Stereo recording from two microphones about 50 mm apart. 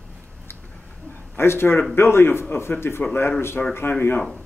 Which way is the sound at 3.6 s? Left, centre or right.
Left.